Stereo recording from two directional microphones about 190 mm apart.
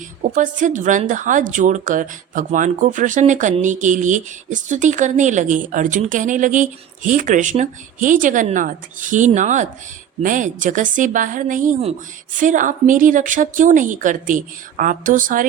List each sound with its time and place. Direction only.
0.2 s a woman's voice: 45° right (ahead or behind)